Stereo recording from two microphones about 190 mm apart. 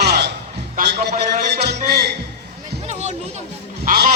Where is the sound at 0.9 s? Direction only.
60° right (ahead or behind).